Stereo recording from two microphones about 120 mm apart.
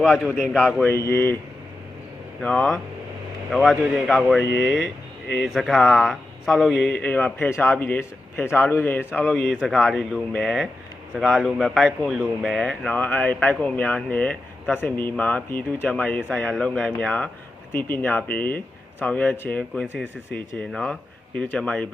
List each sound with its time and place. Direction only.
0.0 s speech: centre (ahead or behind)
0.8 s speech: 20° left (ahead or behind)
2.4 s speech: 5° left (ahead or behind)
9.3 s speech: centre (ahead or behind)
13.0 s speech: 15° left (ahead or behind)